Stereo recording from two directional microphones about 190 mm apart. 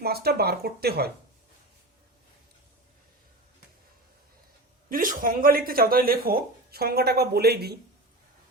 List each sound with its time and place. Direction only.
0.0 s speech: 55° right (ahead or behind)
4.9 s speech: 45° right (ahead or behind)